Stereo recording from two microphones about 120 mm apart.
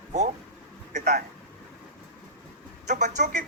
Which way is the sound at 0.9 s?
90° right.